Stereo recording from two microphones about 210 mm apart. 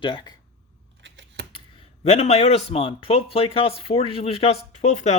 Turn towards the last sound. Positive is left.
turn(degrees=35)  # may be behind; listen again after turning